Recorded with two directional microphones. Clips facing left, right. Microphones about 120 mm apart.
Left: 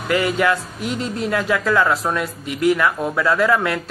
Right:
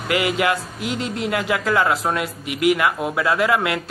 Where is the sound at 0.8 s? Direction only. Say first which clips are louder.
Even; 90° right.